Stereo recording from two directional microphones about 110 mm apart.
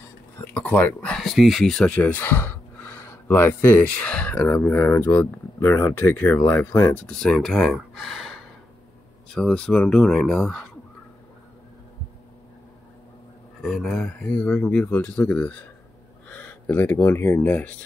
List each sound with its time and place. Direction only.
0.6 s speech: 15° left (ahead or behind)
13.6 s speech: centre (ahead or behind)